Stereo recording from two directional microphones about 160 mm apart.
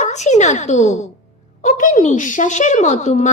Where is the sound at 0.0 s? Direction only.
45° left (ahead or behind).